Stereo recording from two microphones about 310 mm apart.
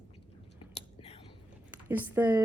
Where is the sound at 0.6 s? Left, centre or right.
Centre.